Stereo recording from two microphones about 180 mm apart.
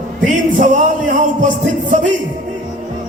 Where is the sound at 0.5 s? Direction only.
45° right (ahead or behind).